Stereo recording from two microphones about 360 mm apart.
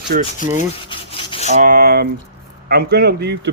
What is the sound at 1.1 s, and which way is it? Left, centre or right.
Rub, centre.